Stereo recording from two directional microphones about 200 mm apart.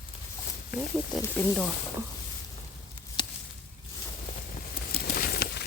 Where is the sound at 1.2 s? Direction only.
15° left (ahead or behind).